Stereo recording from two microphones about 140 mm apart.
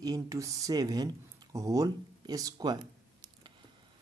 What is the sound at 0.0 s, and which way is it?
Speech, 25° right (ahead or behind).